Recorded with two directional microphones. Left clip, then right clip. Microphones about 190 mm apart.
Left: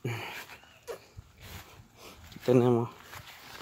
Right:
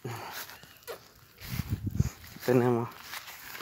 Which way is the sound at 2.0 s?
15° left (ahead or behind).